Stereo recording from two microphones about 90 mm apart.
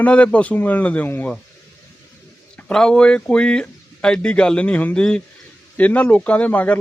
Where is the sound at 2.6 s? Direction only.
10° left (ahead or behind).